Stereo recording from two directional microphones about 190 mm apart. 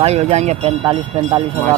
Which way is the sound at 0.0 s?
35° right (ahead or behind).